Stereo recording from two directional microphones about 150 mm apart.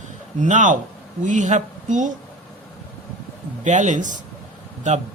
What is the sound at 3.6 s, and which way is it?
Speech, 55° right (ahead or behind).